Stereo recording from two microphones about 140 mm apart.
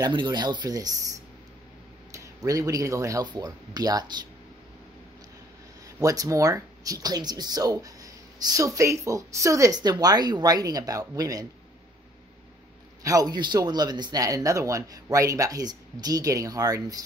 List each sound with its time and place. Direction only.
0.0 s speech: 30° right (ahead or behind)
2.1 s speech: 25° right (ahead or behind)
5.9 s speech: 25° right (ahead or behind)
13.0 s speech: 25° right (ahead or behind)